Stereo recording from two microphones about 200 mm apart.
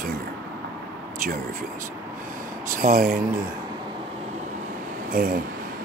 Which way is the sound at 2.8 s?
40° right (ahead or behind).